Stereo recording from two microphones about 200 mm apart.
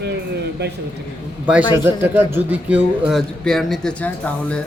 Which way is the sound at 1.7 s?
10° right (ahead or behind).